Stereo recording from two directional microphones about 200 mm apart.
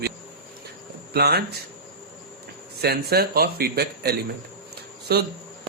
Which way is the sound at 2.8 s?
50° right (ahead or behind).